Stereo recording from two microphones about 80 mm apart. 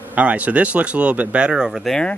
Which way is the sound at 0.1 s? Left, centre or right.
Centre.